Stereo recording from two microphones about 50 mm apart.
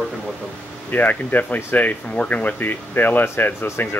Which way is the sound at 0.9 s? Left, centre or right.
Left.